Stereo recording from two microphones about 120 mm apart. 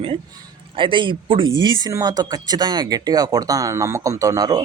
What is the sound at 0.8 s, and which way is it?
Speech, 45° right (ahead or behind).